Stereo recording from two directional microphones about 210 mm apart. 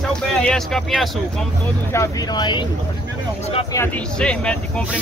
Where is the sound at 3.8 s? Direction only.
5° left (ahead or behind).